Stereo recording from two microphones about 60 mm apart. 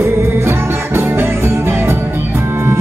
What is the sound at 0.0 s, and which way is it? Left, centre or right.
Music, right.